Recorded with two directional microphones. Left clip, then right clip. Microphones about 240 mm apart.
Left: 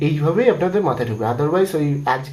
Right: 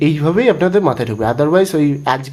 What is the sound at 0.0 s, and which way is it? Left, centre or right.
Speech, right.